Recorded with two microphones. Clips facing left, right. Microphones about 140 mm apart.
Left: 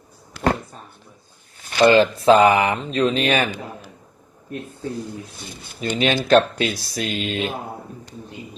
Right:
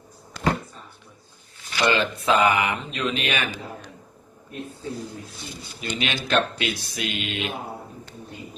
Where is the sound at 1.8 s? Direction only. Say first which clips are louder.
Left 9 dB; 35° left (ahead or behind).